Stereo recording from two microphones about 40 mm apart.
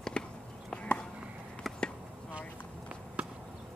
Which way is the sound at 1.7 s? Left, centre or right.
Centre.